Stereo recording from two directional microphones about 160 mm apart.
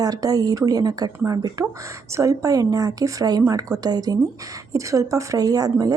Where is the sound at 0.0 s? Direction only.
25° right (ahead or behind).